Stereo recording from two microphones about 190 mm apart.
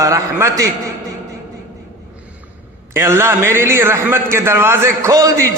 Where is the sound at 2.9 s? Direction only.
15° right (ahead or behind).